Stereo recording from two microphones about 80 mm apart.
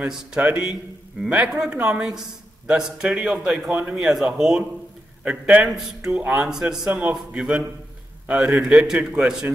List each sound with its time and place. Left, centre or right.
0.5 s a man's voice: right; by 4.6 s centre
5.2 s a man's voice: centre
5.7 s a man's voice: centre